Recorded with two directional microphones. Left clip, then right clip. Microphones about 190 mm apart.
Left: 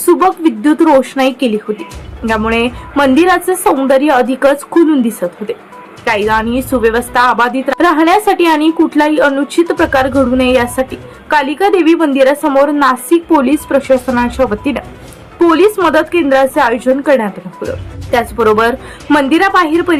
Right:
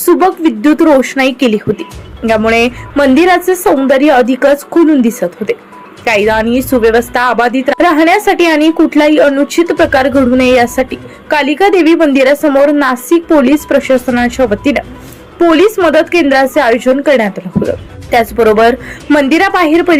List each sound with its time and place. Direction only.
0.0 s a woman's voice: 10° right (ahead or behind)